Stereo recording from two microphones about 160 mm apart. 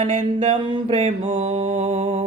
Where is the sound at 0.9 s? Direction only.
45° right (ahead or behind).